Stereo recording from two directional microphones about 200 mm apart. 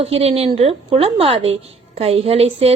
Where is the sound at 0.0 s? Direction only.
30° right (ahead or behind).